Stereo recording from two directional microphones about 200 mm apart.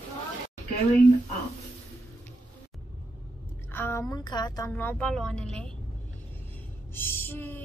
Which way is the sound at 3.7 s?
10° left (ahead or behind).